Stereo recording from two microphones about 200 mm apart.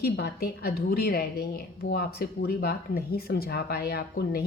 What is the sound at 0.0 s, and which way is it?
A woman's voice, 50° left (ahead or behind).